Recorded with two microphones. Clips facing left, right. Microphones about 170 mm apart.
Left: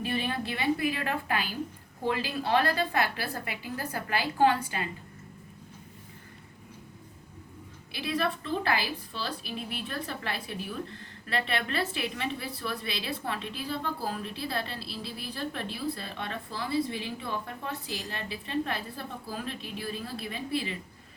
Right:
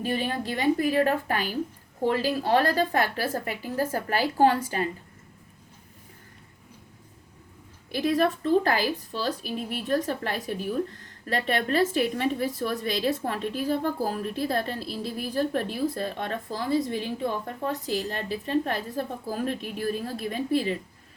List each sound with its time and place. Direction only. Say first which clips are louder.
0.0 s a woman's voice: right 3 dB; 40° right (ahead or behind)
7.9 s speech: right 7 dB; 45° right (ahead or behind)